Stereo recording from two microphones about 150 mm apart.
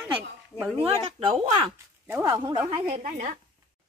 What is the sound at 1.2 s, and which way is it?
Speech, 40° right (ahead or behind).